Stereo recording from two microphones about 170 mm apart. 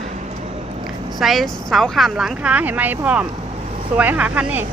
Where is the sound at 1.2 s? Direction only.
Centre (ahead or behind).